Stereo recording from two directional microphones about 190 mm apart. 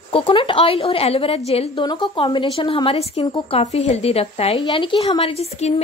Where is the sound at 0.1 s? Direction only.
30° left (ahead or behind).